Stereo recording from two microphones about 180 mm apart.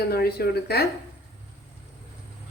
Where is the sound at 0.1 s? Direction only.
60° left (ahead or behind).